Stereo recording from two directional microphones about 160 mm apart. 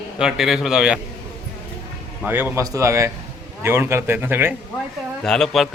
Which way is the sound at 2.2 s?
10° right (ahead or behind).